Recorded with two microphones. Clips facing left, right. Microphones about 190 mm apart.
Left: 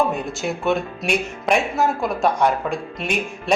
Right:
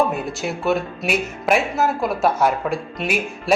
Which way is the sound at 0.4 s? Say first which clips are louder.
Even; centre (ahead or behind).